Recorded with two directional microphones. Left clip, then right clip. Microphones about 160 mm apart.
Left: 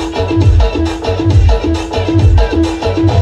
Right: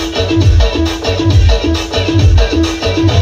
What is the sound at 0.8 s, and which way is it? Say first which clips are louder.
Music: right 1 dB; 55° right (ahead or behind).